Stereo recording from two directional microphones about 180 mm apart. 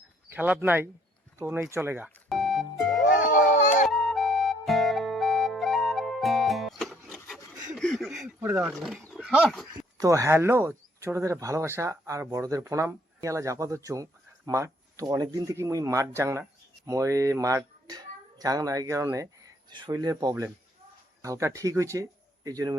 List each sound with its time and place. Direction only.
0.3 s speech: 10° right (ahead or behind)
2.0 s music: centre (ahead or behind)
3.2 s a sound: 45° left (ahead or behind)
3.8 s flute: centre (ahead or behind)
7.3 s pant: centre (ahead or behind)
8.4 s speech: 15° right (ahead or behind)
8.7 s speech: centre (ahead or behind)
9.7 s a man's voice: 20° right (ahead or behind)